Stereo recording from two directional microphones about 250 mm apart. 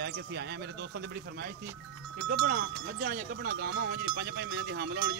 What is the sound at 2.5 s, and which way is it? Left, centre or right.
Speech, right.